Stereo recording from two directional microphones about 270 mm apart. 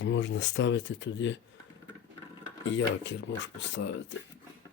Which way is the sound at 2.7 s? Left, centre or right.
Left.